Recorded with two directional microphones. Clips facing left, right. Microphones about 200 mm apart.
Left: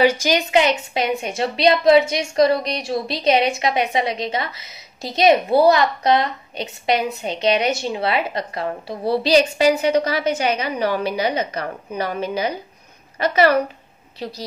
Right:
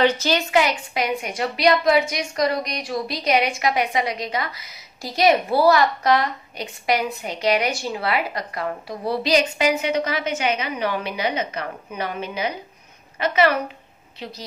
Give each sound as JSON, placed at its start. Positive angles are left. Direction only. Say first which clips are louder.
{"t": 0.0, "sound": "a woman's voice", "louder": "left 2 dB", "side_deg": 10}